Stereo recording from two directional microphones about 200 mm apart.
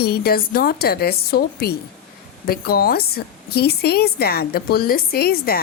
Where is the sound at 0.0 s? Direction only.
50° left (ahead or behind).